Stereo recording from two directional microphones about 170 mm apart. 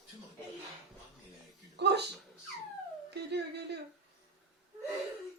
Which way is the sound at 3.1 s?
80° right.